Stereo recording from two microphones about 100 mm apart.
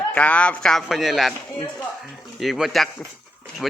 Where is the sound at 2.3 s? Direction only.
Centre (ahead or behind).